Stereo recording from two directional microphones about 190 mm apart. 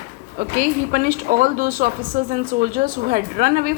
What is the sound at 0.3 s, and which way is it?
A woman's voice, 45° right (ahead or behind).